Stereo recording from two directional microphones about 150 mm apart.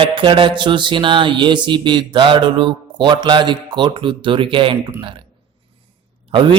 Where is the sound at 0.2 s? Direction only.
35° right (ahead or behind).